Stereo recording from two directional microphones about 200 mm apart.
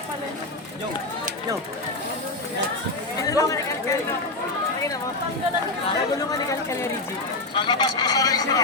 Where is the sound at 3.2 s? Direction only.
15° left (ahead or behind).